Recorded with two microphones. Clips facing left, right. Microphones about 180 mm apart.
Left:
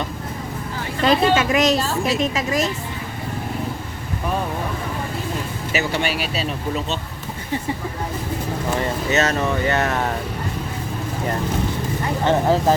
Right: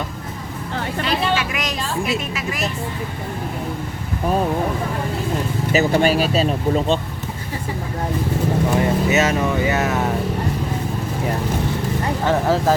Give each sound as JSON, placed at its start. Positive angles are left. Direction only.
{"t": 1.0, "sound": "a woman's voice", "side_deg": 45}
{"t": 5.7, "sound": "speech", "side_deg": -40}
{"t": 8.8, "sound": "speech", "side_deg": -10}
{"t": 12.3, "sound": "speech", "side_deg": 20}